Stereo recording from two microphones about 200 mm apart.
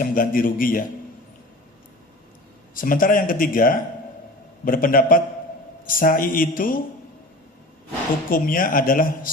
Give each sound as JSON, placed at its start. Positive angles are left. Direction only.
{"t": 0.0, "sound": "a man's voice", "side_deg": 45}
{"t": 2.7, "sound": "a man's voice", "side_deg": 45}
{"t": 8.3, "sound": "a man's voice", "side_deg": 45}